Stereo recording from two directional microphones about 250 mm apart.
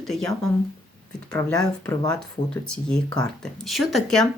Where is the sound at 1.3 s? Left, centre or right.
Centre.